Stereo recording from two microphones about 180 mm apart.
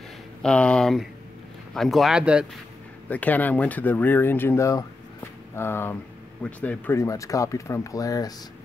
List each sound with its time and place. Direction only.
0.4 s speech: 5° left (ahead or behind)
3.1 s speech: 10° left (ahead or behind)